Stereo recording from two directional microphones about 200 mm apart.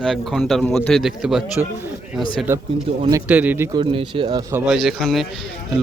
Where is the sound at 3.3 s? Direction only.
10° right (ahead or behind).